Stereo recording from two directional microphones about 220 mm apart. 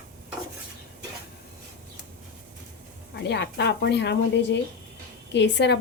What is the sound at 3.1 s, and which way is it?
A woman's voice, 50° left (ahead or behind).